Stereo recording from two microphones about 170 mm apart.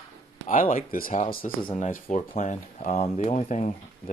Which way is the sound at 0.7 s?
55° left (ahead or behind).